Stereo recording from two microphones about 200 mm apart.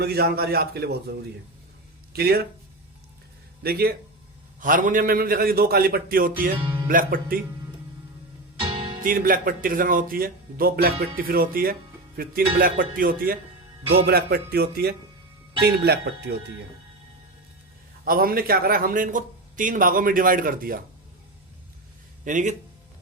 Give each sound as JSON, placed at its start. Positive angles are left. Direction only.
{"t": 0.0, "sound": "a man's voice", "side_deg": -50}
{"t": 2.1, "sound": "a man's voice", "side_deg": -50}
{"t": 3.6, "sound": "a man's voice", "side_deg": -50}
{"t": 6.6, "sound": "music", "side_deg": -25}
{"t": 6.8, "sound": "a man's voice", "side_deg": -45}
{"t": 8.6, "sound": "music", "side_deg": -25}
{"t": 9.0, "sound": "a man's voice", "side_deg": -45}
{"t": 18.0, "sound": "a man's voice", "side_deg": -45}
{"t": 22.2, "sound": "speech", "side_deg": -40}